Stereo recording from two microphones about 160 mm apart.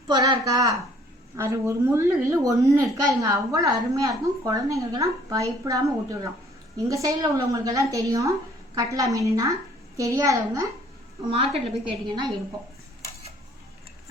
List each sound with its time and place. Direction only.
0.1 s a woman's voice: 25° right (ahead or behind)
11.3 s a woman's voice: 35° right (ahead or behind)